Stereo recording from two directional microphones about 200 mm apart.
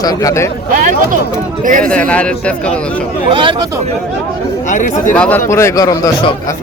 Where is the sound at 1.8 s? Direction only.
5° left (ahead or behind).